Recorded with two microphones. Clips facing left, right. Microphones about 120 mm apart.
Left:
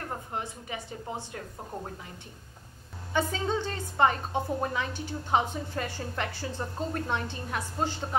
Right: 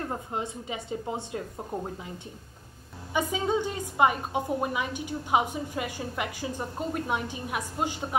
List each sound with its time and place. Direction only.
0.3 s a woman's voice: 20° right (ahead or behind)
3.1 s a woman's voice: 10° right (ahead or behind)